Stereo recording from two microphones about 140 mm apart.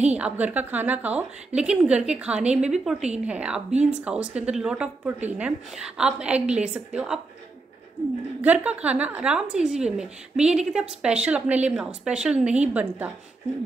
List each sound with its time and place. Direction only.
0.0 s a woman's voice: 10° right (ahead or behind)
8.4 s a woman's voice: 10° right (ahead or behind)